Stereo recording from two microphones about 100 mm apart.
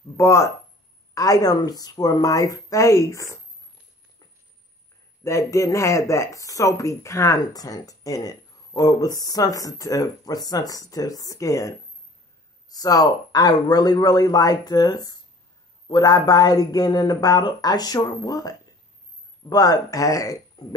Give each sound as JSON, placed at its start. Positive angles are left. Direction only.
{"t": 0.2, "sound": "speech", "side_deg": 30}
{"t": 5.2, "sound": "speech", "side_deg": 30}